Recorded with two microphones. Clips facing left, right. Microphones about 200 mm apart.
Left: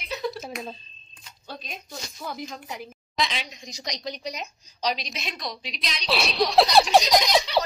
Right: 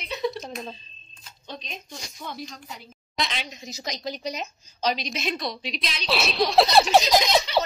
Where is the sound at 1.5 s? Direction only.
5° left (ahead or behind).